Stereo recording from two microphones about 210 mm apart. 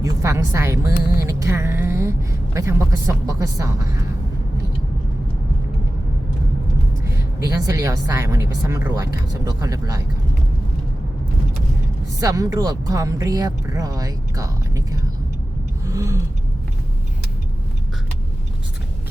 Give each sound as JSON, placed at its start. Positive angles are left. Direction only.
{"t": 0.0, "sound": "a woman's voice", "side_deg": -15}
{"t": 7.0, "sound": "a woman's voice", "side_deg": -15}
{"t": 12.2, "sound": "a woman's voice", "side_deg": -15}
{"t": 15.9, "sound": "a sound", "side_deg": -15}